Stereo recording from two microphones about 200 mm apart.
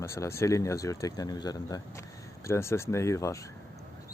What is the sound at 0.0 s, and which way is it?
Speech, 15° left (ahead or behind).